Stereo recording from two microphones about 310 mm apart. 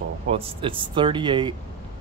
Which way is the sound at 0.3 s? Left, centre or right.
Centre.